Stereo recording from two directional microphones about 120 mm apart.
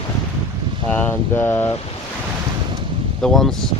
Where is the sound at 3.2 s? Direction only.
Centre (ahead or behind).